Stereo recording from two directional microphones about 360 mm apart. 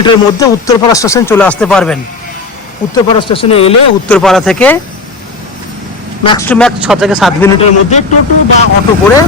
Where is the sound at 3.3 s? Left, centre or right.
Centre.